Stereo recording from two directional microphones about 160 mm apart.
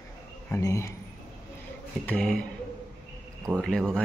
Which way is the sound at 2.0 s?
5° left (ahead or behind).